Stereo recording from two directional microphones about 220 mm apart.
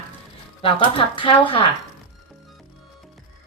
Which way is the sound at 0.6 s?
25° left (ahead or behind).